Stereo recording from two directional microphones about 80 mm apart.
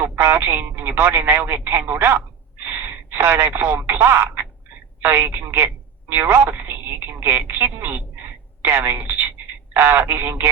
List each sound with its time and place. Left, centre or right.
0.2 s a woman's voice: right